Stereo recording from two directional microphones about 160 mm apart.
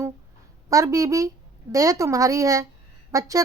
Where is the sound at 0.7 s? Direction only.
20° right (ahead or behind).